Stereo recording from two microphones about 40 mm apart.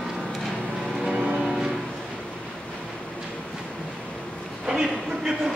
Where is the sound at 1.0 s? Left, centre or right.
Centre.